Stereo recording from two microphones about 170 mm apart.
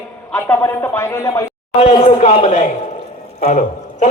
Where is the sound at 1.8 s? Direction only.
40° left (ahead or behind).